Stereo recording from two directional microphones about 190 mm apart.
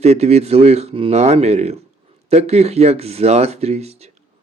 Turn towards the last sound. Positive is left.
turn(degrees=-35)  # may be behind; listen again after turning